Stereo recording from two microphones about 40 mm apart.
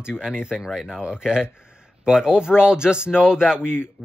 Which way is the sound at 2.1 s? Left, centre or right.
Centre.